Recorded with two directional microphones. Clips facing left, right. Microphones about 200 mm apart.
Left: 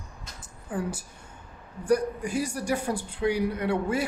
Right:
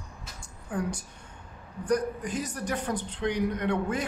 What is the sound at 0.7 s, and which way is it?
A man's voice, 5° left (ahead or behind).